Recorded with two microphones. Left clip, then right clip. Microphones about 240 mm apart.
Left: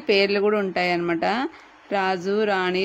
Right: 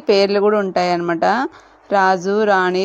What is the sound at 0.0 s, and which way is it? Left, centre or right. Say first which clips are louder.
A woman's voice: right 6 dB; centre.